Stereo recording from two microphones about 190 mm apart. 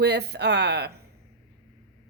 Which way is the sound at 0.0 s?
60° right (ahead or behind).